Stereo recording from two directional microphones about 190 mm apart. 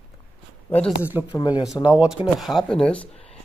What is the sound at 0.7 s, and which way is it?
Speech, 10° left (ahead or behind).